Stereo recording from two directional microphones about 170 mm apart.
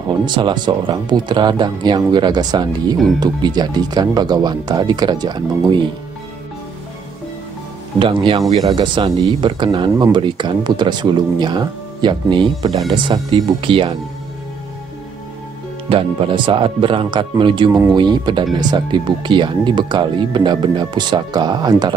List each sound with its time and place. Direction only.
0.2 s speech: 25° right (ahead or behind)
8.0 s speech: 30° right (ahead or behind)
15.9 s speech: 30° right (ahead or behind)